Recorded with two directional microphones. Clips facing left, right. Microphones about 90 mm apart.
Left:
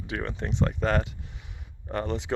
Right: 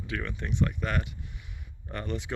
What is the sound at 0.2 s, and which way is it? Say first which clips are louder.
Speech: left 2 dB; 30° left (ahead or behind).